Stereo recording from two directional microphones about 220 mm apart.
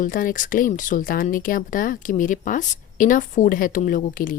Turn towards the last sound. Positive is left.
turn(degrees=40)  # may be behind; listen again after turning